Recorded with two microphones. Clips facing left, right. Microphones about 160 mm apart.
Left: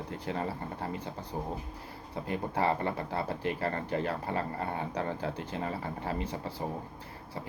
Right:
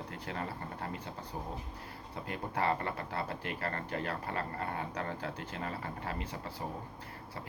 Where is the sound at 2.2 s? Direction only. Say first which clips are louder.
Left 3 dB; 20° left (ahead or behind).